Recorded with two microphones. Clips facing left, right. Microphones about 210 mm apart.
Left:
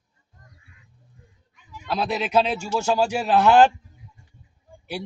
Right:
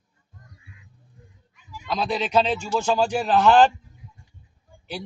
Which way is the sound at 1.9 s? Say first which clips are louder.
Even; 10° left (ahead or behind).